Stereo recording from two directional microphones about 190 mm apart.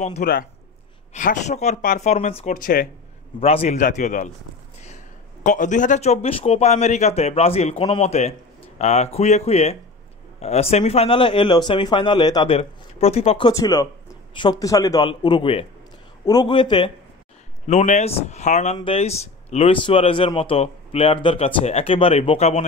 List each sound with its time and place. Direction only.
0.2 s a man's voice: 50° left (ahead or behind)
1.1 s speech: 40° left (ahead or behind)
3.3 s a man's voice: 30° left (ahead or behind)
13.5 s speech: 15° left (ahead or behind)
17.6 s speech: 35° left (ahead or behind)